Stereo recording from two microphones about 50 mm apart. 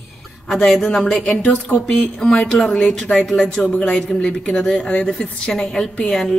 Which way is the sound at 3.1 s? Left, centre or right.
Left.